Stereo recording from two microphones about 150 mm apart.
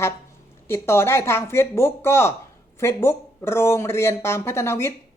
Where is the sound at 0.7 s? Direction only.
15° left (ahead or behind).